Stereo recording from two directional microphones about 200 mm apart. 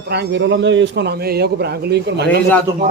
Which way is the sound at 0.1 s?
60° right (ahead or behind).